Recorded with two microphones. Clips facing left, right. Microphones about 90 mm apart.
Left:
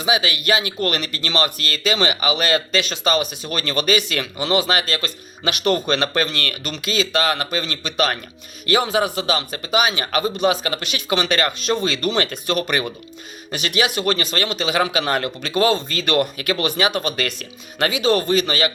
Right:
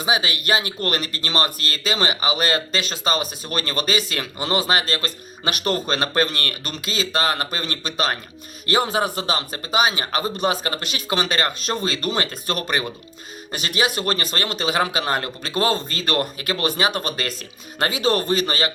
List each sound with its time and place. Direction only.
0.0 s speech: 35° right (ahead or behind)
7.9 s speech: 30° right (ahead or behind)
13.5 s speech: 35° right (ahead or behind)